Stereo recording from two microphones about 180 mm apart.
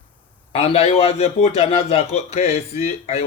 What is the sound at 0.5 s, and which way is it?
A man's voice, 35° left (ahead or behind).